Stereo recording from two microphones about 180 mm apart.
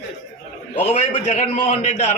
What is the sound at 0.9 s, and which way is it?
A man's voice, 40° left (ahead or behind).